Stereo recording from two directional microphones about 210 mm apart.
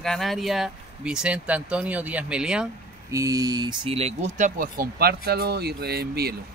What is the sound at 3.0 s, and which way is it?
Speech, 15° right (ahead or behind).